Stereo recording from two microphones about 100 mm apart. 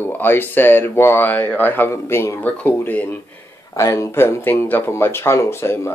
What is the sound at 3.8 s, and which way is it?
Speech, 30° left (ahead or behind).